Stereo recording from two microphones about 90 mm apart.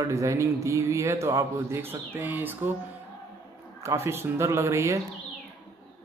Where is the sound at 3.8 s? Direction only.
30° right (ahead or behind).